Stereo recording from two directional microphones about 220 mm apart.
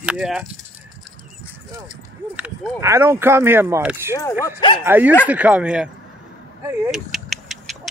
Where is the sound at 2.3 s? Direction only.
5° right (ahead or behind).